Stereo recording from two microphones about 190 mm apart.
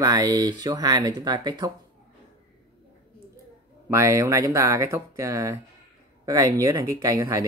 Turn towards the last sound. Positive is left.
turn(degrees=-20)  # may be behind; listen again after turning